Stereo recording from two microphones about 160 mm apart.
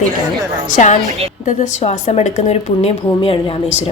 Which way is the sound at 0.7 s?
50° left (ahead or behind).